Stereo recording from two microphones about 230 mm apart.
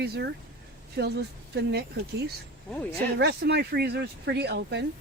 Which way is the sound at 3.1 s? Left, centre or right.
Right.